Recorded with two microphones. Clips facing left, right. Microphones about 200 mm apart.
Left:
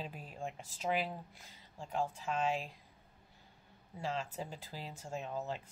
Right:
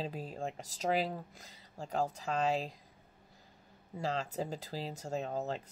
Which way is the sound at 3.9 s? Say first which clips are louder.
Right 4 dB; 40° right (ahead or behind).